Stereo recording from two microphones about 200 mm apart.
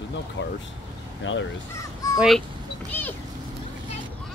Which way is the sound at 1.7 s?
15° left (ahead or behind).